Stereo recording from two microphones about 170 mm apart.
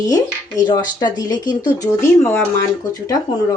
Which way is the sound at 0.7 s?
20° left (ahead or behind).